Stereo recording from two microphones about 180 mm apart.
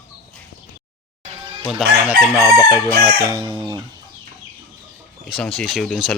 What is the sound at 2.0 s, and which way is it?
Chicken, 15° right (ahead or behind).